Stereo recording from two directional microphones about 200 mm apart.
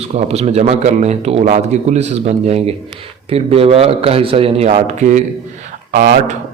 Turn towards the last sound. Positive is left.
turn(degrees=-45)  # may be behind; listen again after turning